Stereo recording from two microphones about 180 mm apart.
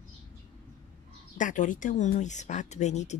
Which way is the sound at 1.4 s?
45° left (ahead or behind).